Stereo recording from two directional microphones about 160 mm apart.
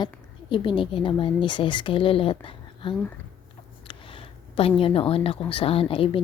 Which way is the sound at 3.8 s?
35° left (ahead or behind).